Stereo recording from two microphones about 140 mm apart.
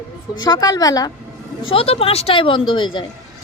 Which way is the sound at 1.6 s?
40° left (ahead or behind).